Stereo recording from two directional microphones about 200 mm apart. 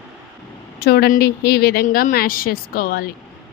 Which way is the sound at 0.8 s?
50° left (ahead or behind).